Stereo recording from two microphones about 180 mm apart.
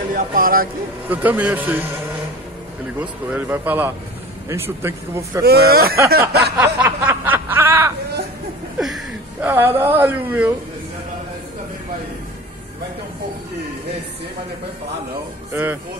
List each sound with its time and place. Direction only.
0.1 s speech: 55° right (ahead or behind)
1.0 s speech: 10° right (ahead or behind)
3.0 s speech: 10° right (ahead or behind)
5.7 s a sound: 55° right (ahead or behind)
6.6 s snicker: 10° right (ahead or behind)
8.7 s a sound: centre (ahead or behind)
15.5 s speech: 10° right (ahead or behind)